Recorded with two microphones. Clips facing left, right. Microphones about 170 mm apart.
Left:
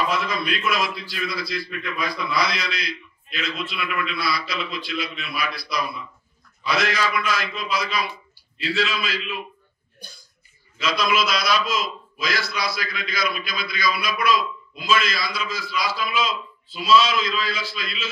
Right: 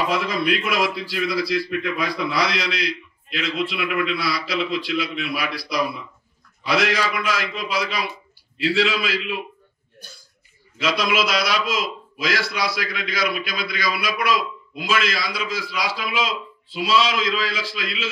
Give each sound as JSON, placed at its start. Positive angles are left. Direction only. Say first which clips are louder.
{"t": 0.3, "sound": "a man's voice", "louder": "right 3 dB", "side_deg": -75}
{"t": 10.8, "sound": "a man's voice", "louder": "right 1 dB", "side_deg": -75}